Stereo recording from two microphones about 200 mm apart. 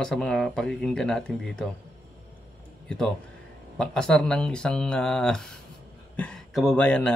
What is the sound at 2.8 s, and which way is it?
Speech, 5° left (ahead or behind).